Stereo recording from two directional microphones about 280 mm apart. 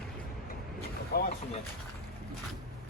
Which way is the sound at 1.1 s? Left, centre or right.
Left.